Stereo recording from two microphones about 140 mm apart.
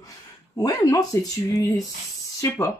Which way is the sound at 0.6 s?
25° left (ahead or behind).